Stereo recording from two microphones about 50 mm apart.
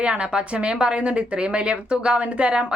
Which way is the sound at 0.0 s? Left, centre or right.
Right.